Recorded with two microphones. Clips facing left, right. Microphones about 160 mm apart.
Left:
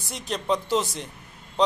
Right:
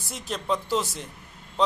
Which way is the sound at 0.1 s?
5° right (ahead or behind).